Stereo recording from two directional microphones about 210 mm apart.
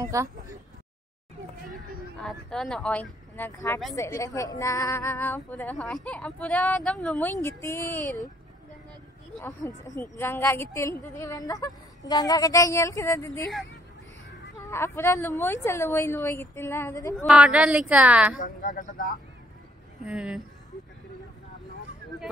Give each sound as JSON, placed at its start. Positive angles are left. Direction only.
{"t": 0.0, "sound": "speech", "side_deg": -15}
{"t": 2.1, "sound": "a woman's voice", "side_deg": 5}
{"t": 9.8, "sound": "a woman's voice", "side_deg": 10}
{"t": 14.7, "sound": "a woman's voice", "side_deg": 10}
{"t": 17.3, "sound": "speech", "side_deg": -5}
{"t": 18.4, "sound": "speech", "side_deg": 40}
{"t": 20.1, "sound": "speech", "side_deg": -5}